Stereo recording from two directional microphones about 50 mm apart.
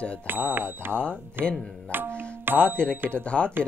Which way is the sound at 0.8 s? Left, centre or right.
Right.